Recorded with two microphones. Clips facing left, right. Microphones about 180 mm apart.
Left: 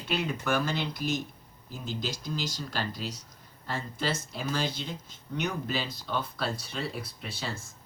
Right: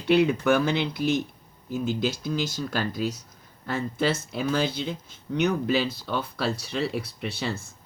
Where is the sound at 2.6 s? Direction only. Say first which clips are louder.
Right 7 dB; 55° right (ahead or behind).